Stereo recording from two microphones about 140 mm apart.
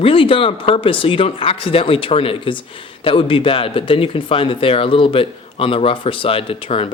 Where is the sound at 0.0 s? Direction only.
40° left (ahead or behind).